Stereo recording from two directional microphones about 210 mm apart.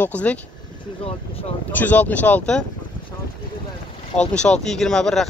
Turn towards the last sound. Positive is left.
turn(degrees=5)  # may be behind; listen again after turning